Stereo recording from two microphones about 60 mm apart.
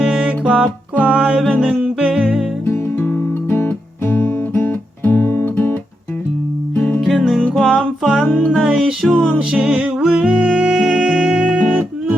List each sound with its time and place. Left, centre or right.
0.0 s music: centre
2.9 s music: left
7.1 s music: centre; by 11.9 s right